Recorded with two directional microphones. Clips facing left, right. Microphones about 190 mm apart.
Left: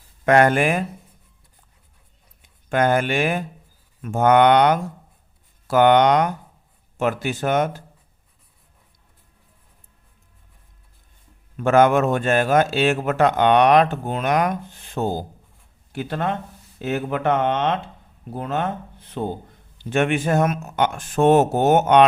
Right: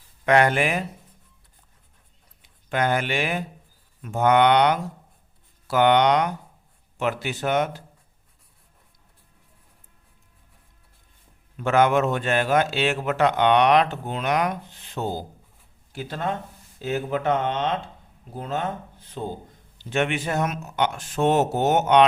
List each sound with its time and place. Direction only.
0.3 s a man's voice: 45° left (ahead or behind)
2.4 s a man's voice: 50° left (ahead or behind)
11.5 s a man's voice: 45° left (ahead or behind)
15.9 s speech: 60° left (ahead or behind)
19.8 s a man's voice: 50° left (ahead or behind)